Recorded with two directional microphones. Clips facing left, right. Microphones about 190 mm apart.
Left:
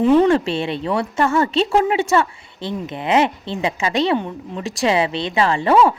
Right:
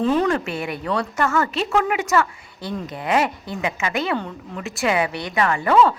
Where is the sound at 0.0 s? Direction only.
20° left (ahead or behind).